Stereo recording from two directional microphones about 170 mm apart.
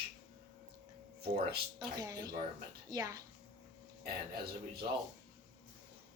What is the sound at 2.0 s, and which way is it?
Speech, 20° right (ahead or behind).